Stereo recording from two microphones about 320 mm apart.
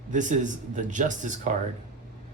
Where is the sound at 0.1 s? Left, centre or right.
Right.